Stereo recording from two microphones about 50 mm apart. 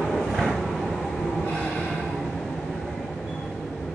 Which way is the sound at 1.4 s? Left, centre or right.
Centre.